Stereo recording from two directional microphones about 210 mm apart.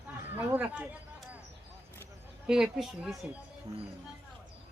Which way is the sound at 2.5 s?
Centre (ahead or behind).